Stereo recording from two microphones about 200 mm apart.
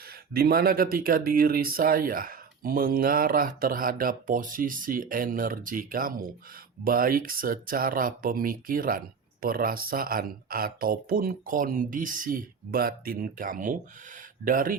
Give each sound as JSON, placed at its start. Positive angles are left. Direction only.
{"t": 0.1, "sound": "speech", "side_deg": -50}